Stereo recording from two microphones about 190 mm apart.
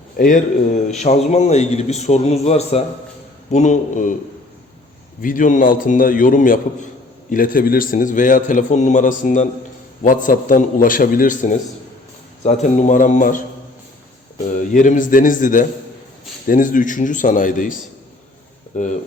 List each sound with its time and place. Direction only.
0.2 s a man's voice: 45° left (ahead or behind)
5.2 s a man's voice: 45° left (ahead or behind)
14.7 s a man's voice: 45° left (ahead or behind)